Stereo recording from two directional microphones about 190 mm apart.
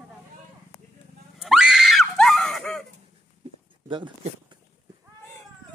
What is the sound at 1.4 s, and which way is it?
Screaming, 5° right (ahead or behind).